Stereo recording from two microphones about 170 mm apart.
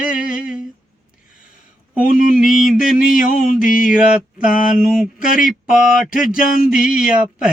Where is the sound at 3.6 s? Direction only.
55° left (ahead or behind).